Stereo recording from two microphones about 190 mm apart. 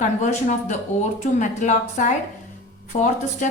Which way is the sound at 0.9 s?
40° left (ahead or behind).